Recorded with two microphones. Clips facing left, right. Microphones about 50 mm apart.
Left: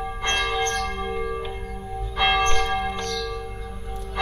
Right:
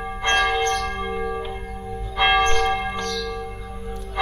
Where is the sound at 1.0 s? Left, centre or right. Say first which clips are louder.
Right 1 dB; centre.